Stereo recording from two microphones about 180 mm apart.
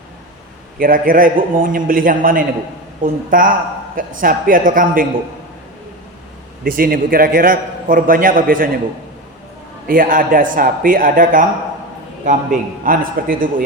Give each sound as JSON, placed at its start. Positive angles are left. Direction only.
{"t": 0.8, "sound": "a man's voice", "side_deg": -50}
{"t": 6.7, "sound": "a man's voice", "side_deg": -55}
{"t": 9.8, "sound": "a man's voice", "side_deg": -50}